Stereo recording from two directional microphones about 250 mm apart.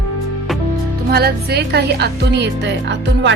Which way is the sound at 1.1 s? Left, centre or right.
Right.